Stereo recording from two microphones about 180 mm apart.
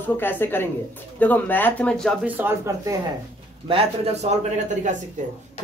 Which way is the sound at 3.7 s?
35° right (ahead or behind).